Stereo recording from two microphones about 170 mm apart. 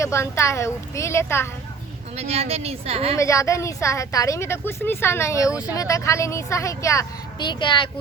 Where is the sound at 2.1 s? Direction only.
35° right (ahead or behind).